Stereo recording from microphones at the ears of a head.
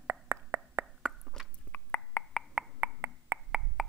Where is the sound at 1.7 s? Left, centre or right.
Left.